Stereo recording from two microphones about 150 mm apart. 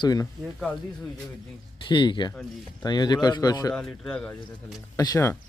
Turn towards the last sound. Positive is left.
turn(degrees=20)  # may be behind; listen again after turning